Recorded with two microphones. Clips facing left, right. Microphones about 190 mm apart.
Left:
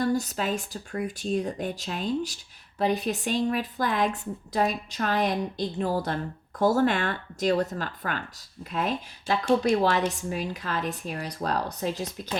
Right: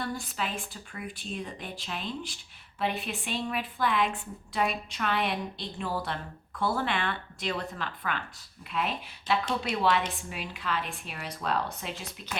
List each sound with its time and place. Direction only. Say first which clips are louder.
0.0 s a woman's voice: left 8 dB; 40° left (ahead or behind)